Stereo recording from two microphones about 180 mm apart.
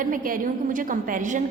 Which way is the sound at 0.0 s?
50° right (ahead or behind).